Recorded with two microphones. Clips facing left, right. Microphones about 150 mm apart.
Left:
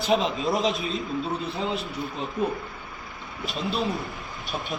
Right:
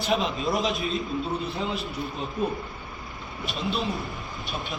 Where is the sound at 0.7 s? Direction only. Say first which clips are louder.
Right 1 dB; centre (ahead or behind).